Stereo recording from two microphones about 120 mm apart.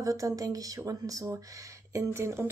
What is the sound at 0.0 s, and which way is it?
Speech, 30° right (ahead or behind).